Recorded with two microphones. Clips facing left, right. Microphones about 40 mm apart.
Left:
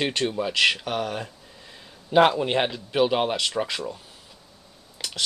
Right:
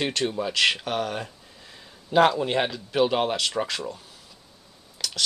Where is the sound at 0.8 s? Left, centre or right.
Centre.